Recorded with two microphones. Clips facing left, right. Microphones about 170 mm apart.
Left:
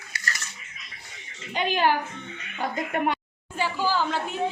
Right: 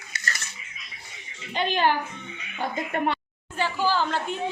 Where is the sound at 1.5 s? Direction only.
5° left (ahead or behind).